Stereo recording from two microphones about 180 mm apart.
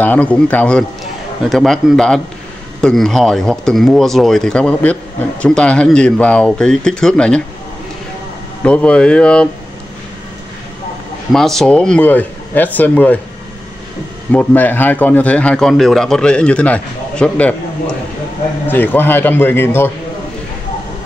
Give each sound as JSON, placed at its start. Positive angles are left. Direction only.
{"t": 0.0, "sound": "a man's voice", "side_deg": 10}
{"t": 8.6, "sound": "speech", "side_deg": 5}
{"t": 11.3, "sound": "a man's voice", "side_deg": 0}
{"t": 14.3, "sound": "a man's voice", "side_deg": 10}
{"t": 18.7, "sound": "a man's voice", "side_deg": 10}